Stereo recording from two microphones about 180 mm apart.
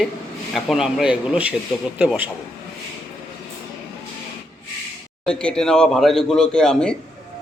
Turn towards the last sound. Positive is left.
turn(degrees=5)  # may be behind; listen again after turning